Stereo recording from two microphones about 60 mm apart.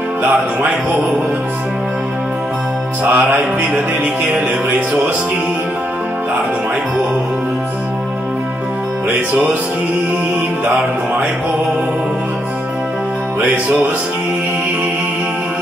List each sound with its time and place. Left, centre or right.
0.2 s music: right
3.0 s music: right